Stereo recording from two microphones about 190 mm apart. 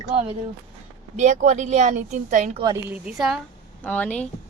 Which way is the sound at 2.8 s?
5° right (ahead or behind).